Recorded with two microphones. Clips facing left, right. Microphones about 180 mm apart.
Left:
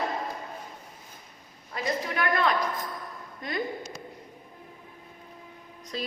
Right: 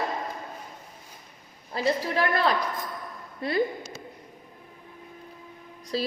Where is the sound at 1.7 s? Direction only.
30° right (ahead or behind).